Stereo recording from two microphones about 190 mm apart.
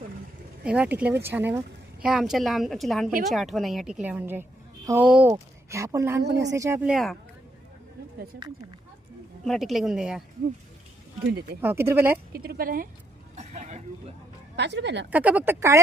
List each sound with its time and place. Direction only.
0.6 s a woman's voice: 5° right (ahead or behind)
5.7 s speech: 15° right (ahead or behind); by 7.2 s centre (ahead or behind)
9.4 s a woman's voice: centre (ahead or behind)
11.6 s speech: 10° right (ahead or behind)
12.4 s a woman's voice: 50° right (ahead or behind)
13.3 s throat clearing: 35° right (ahead or behind)
14.5 s speech: 65° right (ahead or behind)
15.1 s speech: 5° right (ahead or behind)